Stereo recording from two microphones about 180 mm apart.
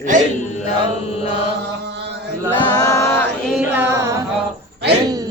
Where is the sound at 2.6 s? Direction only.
20° left (ahead or behind).